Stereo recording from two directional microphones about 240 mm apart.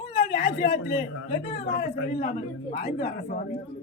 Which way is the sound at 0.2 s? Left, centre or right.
Left.